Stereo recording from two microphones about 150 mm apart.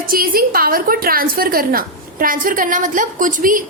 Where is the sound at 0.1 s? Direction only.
75° right (ahead or behind).